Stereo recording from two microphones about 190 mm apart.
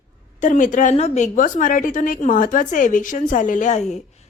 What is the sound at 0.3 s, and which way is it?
A woman's voice, 40° left (ahead or behind).